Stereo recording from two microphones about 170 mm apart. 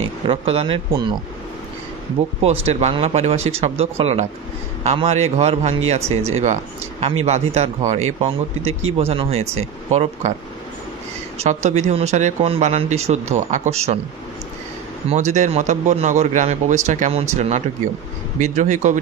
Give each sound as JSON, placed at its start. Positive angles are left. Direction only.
{"t": 0.3, "sound": "a man's voice", "side_deg": -35}
{"t": 2.6, "sound": "a man's voice", "side_deg": -40}
{"t": 11.3, "sound": "a man's voice", "side_deg": -40}
{"t": 15.0, "sound": "a man's voice", "side_deg": -45}